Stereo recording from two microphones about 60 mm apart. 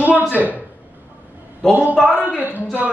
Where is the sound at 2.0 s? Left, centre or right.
Centre.